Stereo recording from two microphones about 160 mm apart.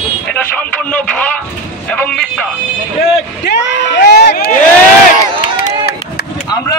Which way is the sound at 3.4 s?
90° left.